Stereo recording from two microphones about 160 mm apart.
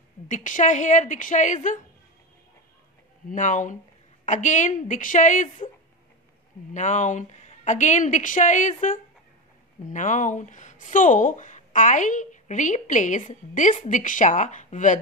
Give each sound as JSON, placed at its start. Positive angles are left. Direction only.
{"t": 0.3, "sound": "speech", "side_deg": 55}
{"t": 3.3, "sound": "speech", "side_deg": 50}
{"t": 6.7, "sound": "speech", "side_deg": 50}